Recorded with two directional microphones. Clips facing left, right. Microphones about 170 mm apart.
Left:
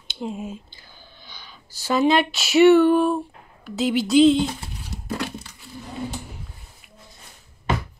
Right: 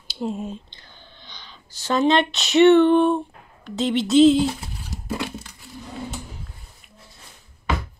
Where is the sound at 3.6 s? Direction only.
5° left (ahead or behind).